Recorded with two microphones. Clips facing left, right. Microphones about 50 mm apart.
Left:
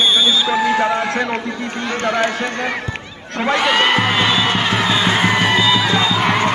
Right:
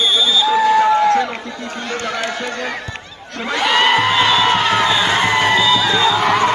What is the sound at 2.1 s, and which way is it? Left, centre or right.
Speech, centre.